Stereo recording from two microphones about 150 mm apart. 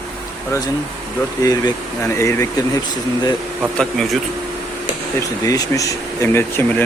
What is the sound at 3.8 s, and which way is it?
Speech, centre (ahead or behind).